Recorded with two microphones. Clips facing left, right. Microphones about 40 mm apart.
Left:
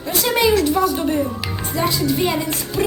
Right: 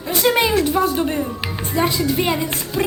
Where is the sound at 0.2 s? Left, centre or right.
Right.